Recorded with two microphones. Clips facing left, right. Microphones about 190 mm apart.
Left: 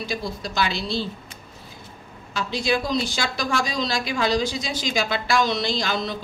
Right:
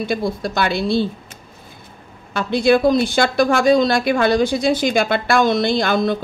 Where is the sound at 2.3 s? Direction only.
55° right (ahead or behind).